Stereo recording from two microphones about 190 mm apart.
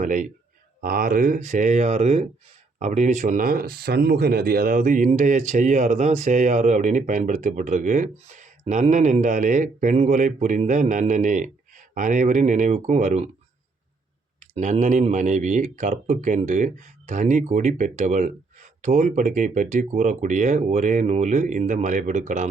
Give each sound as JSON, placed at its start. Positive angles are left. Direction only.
{"t": 0.0, "sound": "a man's voice", "side_deg": -45}
{"t": 14.3, "sound": "speech", "side_deg": -35}